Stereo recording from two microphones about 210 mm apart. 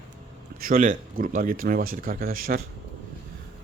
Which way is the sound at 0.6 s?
40° right (ahead or behind).